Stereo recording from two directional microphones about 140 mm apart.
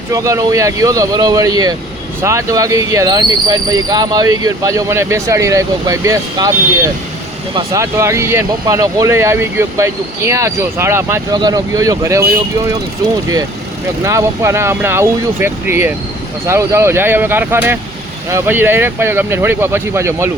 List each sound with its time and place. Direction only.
0.1 s speech: 25° right (ahead or behind)
7.5 s speech: 25° right (ahead or behind)
11.3 s speech: 30° right (ahead or behind)
14.0 s speech: 20° right (ahead or behind)